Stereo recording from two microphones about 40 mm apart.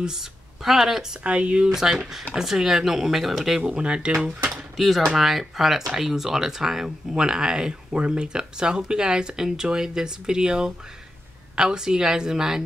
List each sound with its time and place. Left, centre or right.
0.0 s a woman's voice: centre
1.2 s speech: right
1.7 s speech: centre
3.7 s speech: right
4.7 s speech: centre